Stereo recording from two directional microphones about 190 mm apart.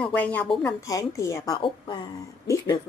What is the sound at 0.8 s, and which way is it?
A woman's voice, 15° left (ahead or behind).